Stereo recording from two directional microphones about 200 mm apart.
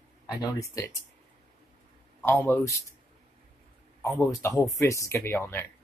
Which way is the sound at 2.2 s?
10° left (ahead or behind).